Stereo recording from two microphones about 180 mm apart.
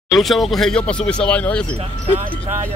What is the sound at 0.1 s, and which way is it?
Speech, centre (ahead or behind).